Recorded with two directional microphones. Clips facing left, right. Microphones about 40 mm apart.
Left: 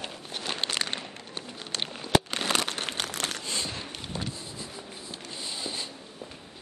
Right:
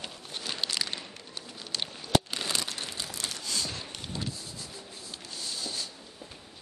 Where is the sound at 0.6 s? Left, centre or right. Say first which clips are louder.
Left 2 dB; left.